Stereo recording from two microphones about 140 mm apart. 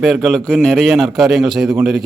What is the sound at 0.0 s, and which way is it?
A man's voice, centre (ahead or behind).